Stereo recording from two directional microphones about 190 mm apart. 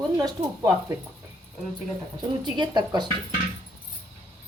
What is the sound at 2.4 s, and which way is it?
Speech, 25° right (ahead or behind).